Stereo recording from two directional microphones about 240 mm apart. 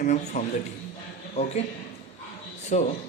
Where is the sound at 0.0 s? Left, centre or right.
Left.